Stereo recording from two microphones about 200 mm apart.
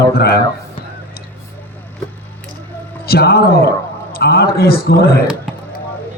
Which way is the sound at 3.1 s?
50° left (ahead or behind).